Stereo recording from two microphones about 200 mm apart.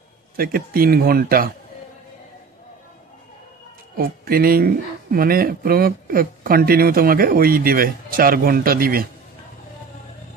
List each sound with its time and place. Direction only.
0.4 s speech: 50° right (ahead or behind)
3.9 s speech: 50° right (ahead or behind)